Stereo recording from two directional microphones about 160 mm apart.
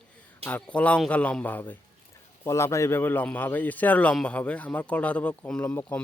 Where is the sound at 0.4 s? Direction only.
10° left (ahead or behind).